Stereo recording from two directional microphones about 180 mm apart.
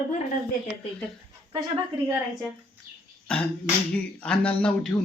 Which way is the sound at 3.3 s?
5° left (ahead or behind).